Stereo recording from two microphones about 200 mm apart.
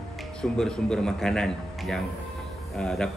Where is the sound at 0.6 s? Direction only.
5° left (ahead or behind).